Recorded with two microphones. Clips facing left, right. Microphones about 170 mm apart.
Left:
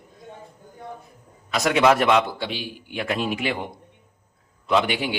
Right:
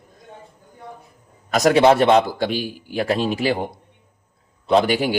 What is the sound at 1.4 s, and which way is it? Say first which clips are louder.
Speech: right 4 dB; 40° right (ahead or behind).